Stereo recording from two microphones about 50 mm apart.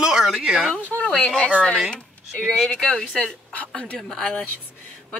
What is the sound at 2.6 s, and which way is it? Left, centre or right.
A woman's voice, centre.